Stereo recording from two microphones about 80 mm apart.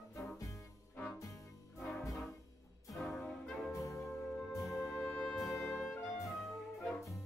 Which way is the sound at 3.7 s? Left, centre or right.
Left.